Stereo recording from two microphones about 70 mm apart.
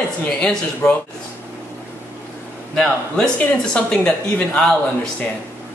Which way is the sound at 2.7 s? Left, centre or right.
Centre.